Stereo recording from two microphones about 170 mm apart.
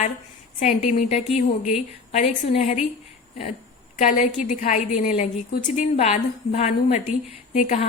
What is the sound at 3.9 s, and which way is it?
A woman's voice, 40° left (ahead or behind).